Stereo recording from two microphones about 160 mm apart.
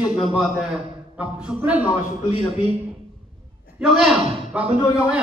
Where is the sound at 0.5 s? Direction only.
5° right (ahead or behind).